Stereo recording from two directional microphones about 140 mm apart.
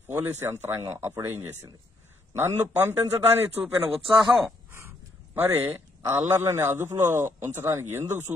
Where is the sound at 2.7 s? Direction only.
15° right (ahead or behind).